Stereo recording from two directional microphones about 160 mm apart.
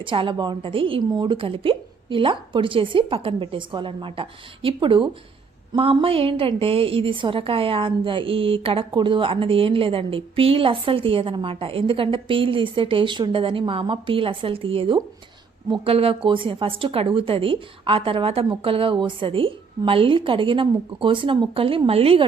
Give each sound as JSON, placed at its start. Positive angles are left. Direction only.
{"t": 0.0, "sound": "a woman's voice", "side_deg": -30}